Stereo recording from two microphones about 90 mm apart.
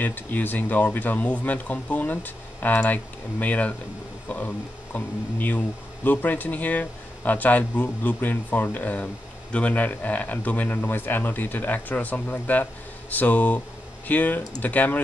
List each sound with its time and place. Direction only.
0.0 s speech: 20° left (ahead or behind)